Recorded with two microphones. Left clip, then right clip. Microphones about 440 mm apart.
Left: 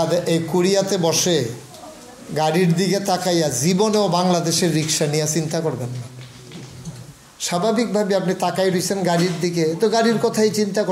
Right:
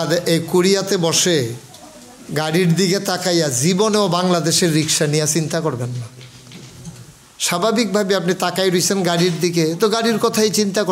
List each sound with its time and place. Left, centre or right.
0.0 s a man's voice: right
7.3 s a man's voice: right